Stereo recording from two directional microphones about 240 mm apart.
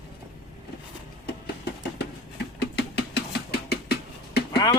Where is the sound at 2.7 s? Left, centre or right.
Left.